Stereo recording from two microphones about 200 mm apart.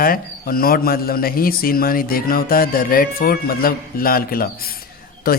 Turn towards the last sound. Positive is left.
turn(degrees=50)  # may be behind; listen again after turning